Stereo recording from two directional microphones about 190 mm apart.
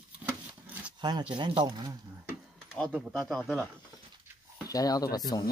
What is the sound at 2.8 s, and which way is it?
Speech, 5° right (ahead or behind).